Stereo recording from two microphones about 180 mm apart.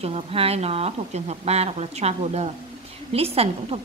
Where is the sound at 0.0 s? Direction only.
35° right (ahead or behind).